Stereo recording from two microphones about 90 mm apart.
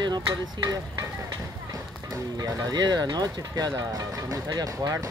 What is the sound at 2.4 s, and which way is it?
Speech, 45° right (ahead or behind).